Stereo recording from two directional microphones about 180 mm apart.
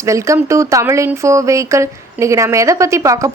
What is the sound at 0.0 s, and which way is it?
A woman's voice, 15° right (ahead or behind).